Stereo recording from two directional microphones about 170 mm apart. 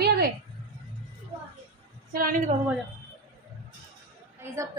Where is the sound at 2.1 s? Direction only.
55° right (ahead or behind).